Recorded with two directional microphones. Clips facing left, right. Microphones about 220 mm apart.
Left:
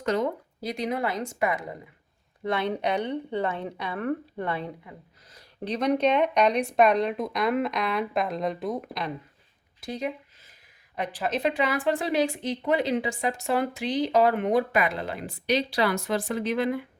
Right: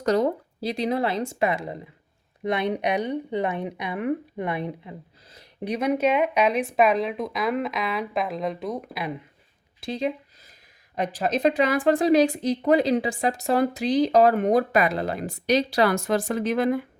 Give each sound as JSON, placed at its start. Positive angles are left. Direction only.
{"t": 0.0, "sound": "speech", "side_deg": -35}
{"t": 5.6, "sound": "speech", "side_deg": -10}
{"t": 9.8, "sound": "a sound", "side_deg": -30}
{"t": 10.9, "sound": "speech", "side_deg": -40}